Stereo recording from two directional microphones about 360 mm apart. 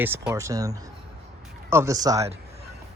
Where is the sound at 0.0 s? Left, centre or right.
Centre.